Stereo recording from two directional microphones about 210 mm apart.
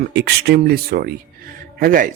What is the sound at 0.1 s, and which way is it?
Speech, 55° right (ahead or behind).